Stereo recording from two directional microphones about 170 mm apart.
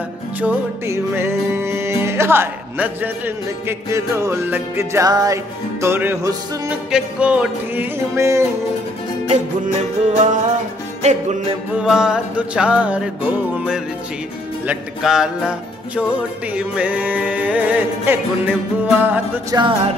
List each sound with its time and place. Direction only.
0.4 s music: 15° right (ahead or behind)
9.3 s music: 40° right (ahead or behind)
11.8 s music: 5° right (ahead or behind)
16.5 s music: 5° right (ahead or behind)
19.5 s music: 20° right (ahead or behind)